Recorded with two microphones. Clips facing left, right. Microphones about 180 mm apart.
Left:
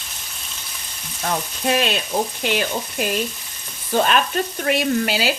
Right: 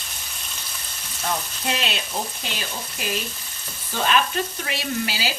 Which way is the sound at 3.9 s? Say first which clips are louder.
Left 4 dB; 50° left (ahead or behind).